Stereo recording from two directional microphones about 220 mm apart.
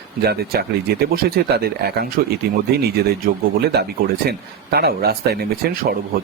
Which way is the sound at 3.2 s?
45° right (ahead or behind).